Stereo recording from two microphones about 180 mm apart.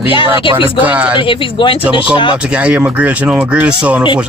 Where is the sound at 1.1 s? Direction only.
30° left (ahead or behind).